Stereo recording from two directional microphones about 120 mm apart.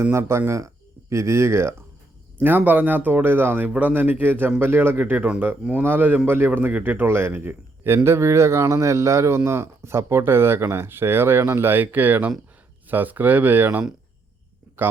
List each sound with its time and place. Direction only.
0.0 s speech: 20° right (ahead or behind)